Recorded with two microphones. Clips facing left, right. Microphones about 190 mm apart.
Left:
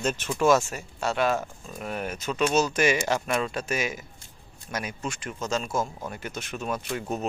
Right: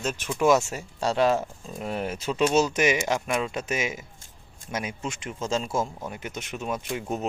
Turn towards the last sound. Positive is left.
turn(degrees=-20)  # may be behind; listen again after turning